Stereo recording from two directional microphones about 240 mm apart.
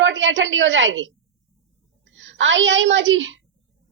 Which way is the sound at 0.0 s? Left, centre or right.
Right.